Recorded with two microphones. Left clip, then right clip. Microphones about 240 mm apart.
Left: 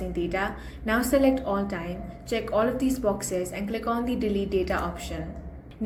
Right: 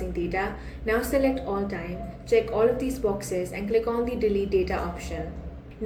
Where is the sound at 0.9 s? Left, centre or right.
Left.